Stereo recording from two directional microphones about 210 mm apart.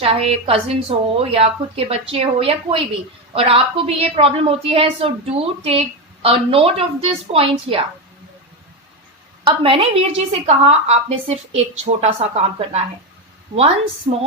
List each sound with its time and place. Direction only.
0.0 s a woman's voice: 30° right (ahead or behind)
9.5 s a woman's voice: 25° right (ahead or behind)